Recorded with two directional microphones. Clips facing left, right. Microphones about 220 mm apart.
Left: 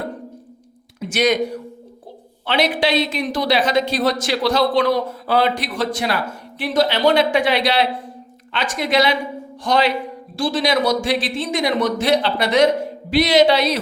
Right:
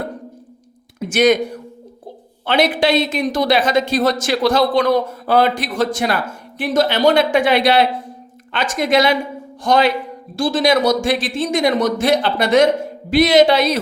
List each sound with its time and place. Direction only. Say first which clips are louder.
0.9 s speech: right 4 dB; 50° right (ahead or behind)
2.5 s a woman's voice: right 3 dB; 50° right (ahead or behind)